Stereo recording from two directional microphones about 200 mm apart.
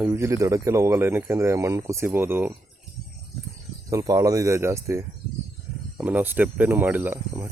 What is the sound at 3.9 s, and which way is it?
Speech, 15° right (ahead or behind).